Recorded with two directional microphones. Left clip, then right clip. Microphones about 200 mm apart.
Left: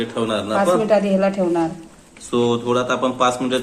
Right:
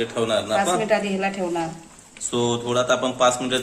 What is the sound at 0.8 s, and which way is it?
Speech, 20° left (ahead or behind).